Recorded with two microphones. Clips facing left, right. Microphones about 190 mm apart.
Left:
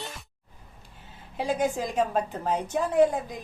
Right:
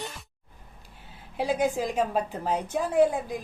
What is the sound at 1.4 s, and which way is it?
A woman's voice, 10° right (ahead or behind).